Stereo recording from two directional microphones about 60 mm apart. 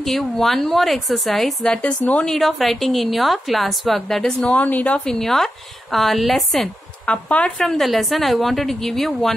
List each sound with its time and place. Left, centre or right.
0.0 s a woman's voice: centre
1.8 s speech: left
2.1 s a woman's voice: centre
4.5 s speech: left
4.9 s a woman's voice: centre
7.1 s speech: left
7.6 s a woman's voice: centre